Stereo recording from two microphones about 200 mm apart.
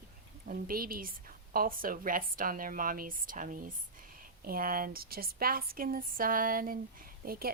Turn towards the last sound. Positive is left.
turn(degrees=-45)  # may be behind; listen again after turning